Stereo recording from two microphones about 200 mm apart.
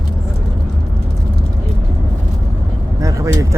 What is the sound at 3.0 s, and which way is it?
Vehicle, 15° right (ahead or behind).